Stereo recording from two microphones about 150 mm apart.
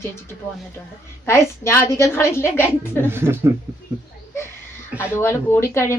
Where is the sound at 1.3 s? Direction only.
15° left (ahead or behind).